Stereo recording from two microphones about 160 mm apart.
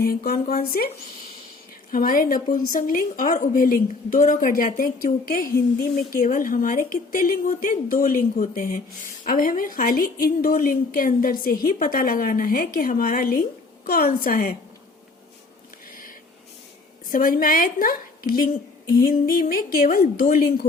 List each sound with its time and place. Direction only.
0.3 s speech: 70° left (ahead or behind)
1.9 s a woman's voice: 60° left (ahead or behind)
17.1 s a woman's voice: 60° left (ahead or behind)